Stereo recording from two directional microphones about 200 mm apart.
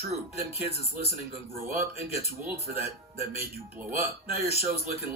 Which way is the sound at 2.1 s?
10° right (ahead or behind).